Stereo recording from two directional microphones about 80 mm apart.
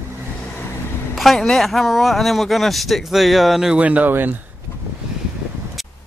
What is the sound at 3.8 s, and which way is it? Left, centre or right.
Speech, right.